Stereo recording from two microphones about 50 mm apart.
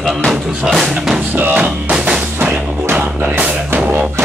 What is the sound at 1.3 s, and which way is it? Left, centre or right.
Music, right.